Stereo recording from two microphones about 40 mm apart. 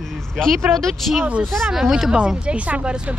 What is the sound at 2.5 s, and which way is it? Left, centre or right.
Speech, right.